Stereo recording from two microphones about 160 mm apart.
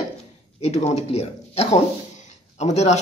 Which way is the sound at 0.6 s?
40° left (ahead or behind).